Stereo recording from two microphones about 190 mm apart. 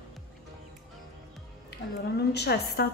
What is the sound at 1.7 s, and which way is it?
A woman's voice, 60° left (ahead or behind).